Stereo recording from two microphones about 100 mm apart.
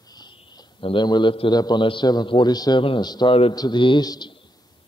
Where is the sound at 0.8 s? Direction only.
50° left (ahead or behind).